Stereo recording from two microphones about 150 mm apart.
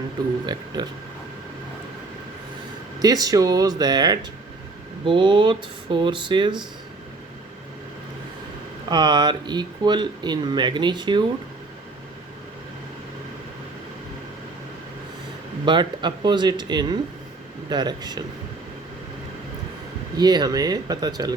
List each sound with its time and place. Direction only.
0.4 s speech: 30° right (ahead or behind)
3.0 s speech: 25° right (ahead or behind)
8.9 s speech: 30° right (ahead or behind)
15.6 s speech: 30° right (ahead or behind)
20.1 s speech: 25° right (ahead or behind)